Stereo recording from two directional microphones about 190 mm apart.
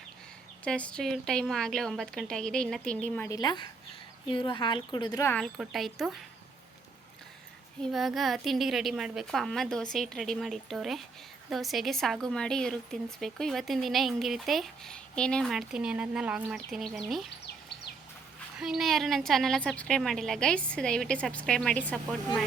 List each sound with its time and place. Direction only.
0.6 s a woman's voice: 5° left (ahead or behind)
3.3 s a woman's voice: 20° left (ahead or behind)
5.2 s a woman's voice: 10° left (ahead or behind)
7.8 s a woman's voice: centre (ahead or behind)
18.6 s a woman's voice: centre (ahead or behind)